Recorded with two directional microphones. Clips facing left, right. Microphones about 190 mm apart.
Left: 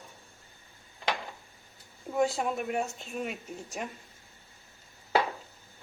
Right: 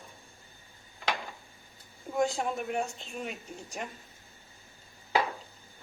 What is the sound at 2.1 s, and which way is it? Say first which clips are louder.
Speech: left 1 dB; 5° left (ahead or behind).